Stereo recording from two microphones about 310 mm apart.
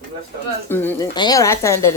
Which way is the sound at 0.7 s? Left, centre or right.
Centre.